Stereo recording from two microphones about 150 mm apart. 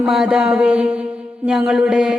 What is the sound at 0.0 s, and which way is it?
Mantra, centre (ahead or behind).